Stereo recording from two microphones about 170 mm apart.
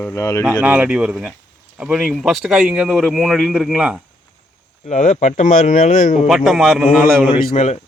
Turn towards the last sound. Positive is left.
turn(degrees=40)  # may be behind; listen again after turning